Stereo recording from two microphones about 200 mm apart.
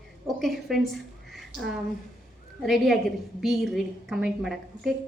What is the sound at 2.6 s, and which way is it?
A woman's voice, centre (ahead or behind).